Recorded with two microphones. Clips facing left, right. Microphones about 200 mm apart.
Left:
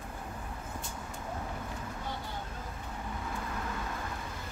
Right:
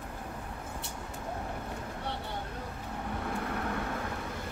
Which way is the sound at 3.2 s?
65° right (ahead or behind).